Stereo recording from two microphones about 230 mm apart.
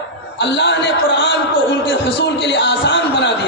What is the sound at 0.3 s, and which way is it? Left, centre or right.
A man's voice, left.